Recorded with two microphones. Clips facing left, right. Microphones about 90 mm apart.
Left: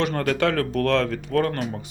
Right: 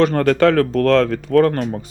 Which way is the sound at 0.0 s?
40° right (ahead or behind).